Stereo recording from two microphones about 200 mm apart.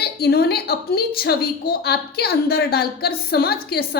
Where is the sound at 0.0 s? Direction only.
55° left (ahead or behind).